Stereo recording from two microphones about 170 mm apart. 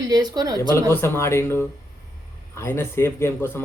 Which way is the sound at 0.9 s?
15° left (ahead or behind).